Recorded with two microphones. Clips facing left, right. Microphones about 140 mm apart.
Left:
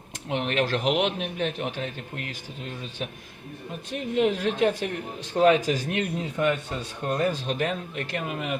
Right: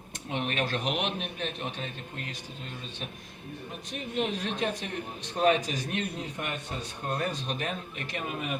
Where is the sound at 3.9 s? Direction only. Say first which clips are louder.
Left 7 dB; 65° left (ahead or behind).